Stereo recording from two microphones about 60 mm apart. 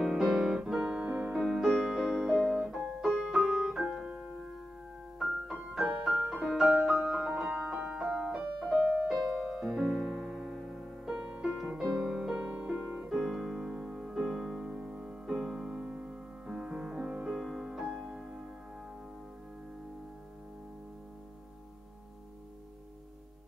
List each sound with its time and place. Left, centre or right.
0.0 s music: centre
1.0 s music: right
1.3 s music: centre
5.9 s music: centre
12.4 s music: centre
13.2 s music: centre
15.8 s music: right